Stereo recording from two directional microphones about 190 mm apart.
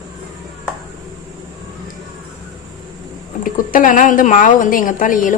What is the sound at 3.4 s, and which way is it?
Speech, 45° left (ahead or behind).